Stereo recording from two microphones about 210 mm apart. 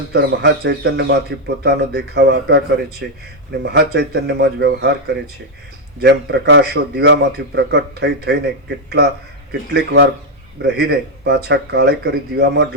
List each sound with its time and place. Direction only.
0.1 s a man's voice: 55° right (ahead or behind)
9.5 s speech: 50° right (ahead or behind)